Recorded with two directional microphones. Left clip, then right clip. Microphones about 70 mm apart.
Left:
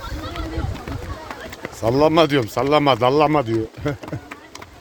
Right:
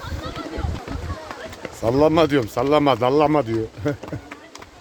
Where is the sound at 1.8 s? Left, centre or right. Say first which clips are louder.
Left 1 dB; right.